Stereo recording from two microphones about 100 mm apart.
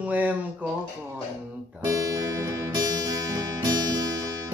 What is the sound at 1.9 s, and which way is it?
Music, 35° right (ahead or behind).